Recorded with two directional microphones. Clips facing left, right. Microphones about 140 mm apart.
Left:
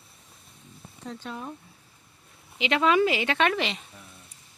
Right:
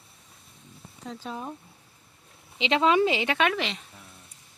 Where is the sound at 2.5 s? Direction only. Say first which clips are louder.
Even; 25° right (ahead or behind).